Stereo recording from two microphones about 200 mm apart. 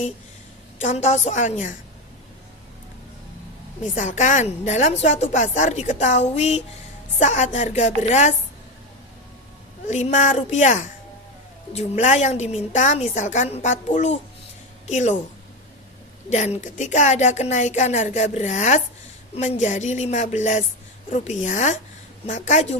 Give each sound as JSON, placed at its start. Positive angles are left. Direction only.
{"t": 0.8, "sound": "a woman's voice", "side_deg": 35}
{"t": 3.9, "sound": "a woman's voice", "side_deg": 40}
{"t": 9.8, "sound": "a woman's voice", "side_deg": 35}
{"t": 16.3, "sound": "a woman's voice", "side_deg": 35}